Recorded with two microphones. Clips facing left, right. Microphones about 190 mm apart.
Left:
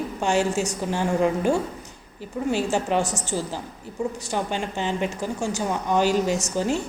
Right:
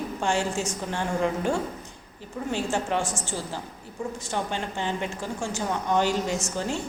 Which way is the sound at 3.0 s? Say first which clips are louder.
Left 4 dB; 40° left (ahead or behind).